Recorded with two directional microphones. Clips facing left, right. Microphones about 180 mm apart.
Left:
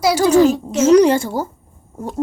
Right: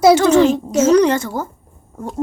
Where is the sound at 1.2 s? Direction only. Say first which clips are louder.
Left 2 dB; 30° left (ahead or behind).